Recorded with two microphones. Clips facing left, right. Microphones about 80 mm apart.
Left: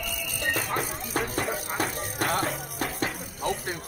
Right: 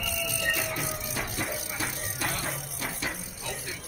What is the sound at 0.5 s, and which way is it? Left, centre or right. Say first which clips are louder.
Music: left 5 dB; left.